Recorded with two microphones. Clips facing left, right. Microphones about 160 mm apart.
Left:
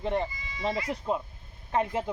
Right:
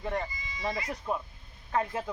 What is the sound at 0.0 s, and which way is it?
A man's voice, 25° left (ahead or behind).